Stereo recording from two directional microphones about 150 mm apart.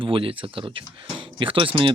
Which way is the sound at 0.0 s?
35° right (ahead or behind).